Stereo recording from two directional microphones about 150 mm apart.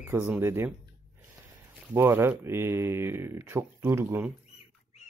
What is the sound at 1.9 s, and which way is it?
Speech, 15° right (ahead or behind).